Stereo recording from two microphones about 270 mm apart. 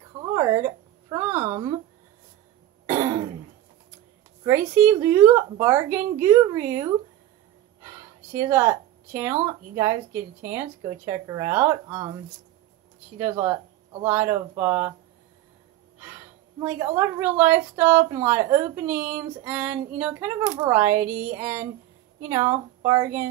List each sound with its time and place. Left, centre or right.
0.2 s a sound: centre
2.9 s throat clearing: centre
4.5 s a woman's voice: centre
13.2 s a woman's voice: centre
16.5 s a woman's voice: centre